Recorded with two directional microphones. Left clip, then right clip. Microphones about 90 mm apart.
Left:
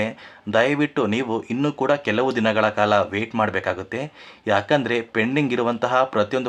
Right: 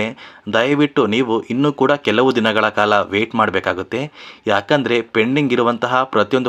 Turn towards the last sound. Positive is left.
turn(degrees=-40)  # may be behind; listen again after turning